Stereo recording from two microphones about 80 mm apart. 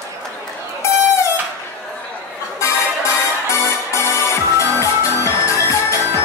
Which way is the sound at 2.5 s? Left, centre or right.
Left.